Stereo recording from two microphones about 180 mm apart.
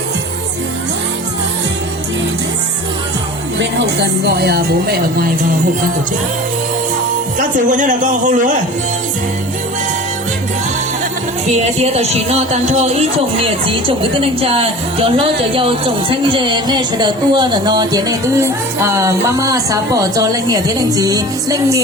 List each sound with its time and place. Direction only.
3.6 s speech: 75° right (ahead or behind); by 5.5 s 55° right (ahead or behind)
7.3 s speech: 45° right (ahead or behind)
11.4 s speech: 40° right (ahead or behind); by 21.8 s 20° right (ahead or behind)